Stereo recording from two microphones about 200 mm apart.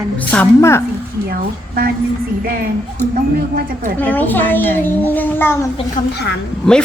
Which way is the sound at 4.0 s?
10° left (ahead or behind).